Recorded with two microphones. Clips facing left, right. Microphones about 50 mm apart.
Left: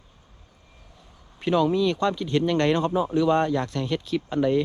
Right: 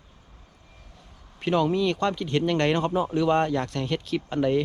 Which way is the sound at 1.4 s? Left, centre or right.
Right.